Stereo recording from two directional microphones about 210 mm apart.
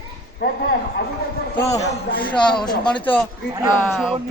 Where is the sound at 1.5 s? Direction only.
15° left (ahead or behind).